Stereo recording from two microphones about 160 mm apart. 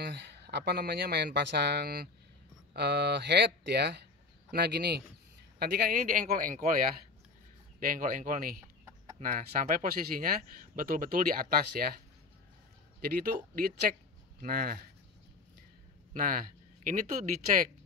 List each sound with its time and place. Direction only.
0.0 s speech: 90° right
2.7 s speech: 90° right
5.6 s speech: 70° right (ahead or behind); by 6.7 s 55° right (ahead or behind)
7.8 s speech: 60° right (ahead or behind)
13.0 s a man's voice: 65° right (ahead or behind)
16.1 s speech: 55° right (ahead or behind)